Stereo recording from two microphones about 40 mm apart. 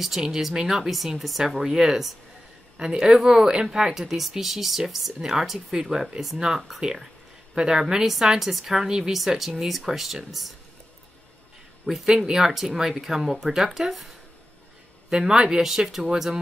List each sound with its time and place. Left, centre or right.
0.0 s speech: centre
0.8 s speech: centre
1.5 s speech: centre
2.8 s a woman's voice: centre
9.4 s speech: centre
11.8 s speech: centre
15.0 s speech: centre